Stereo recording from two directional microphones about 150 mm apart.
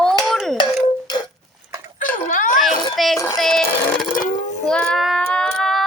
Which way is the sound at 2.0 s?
60° left (ahead or behind).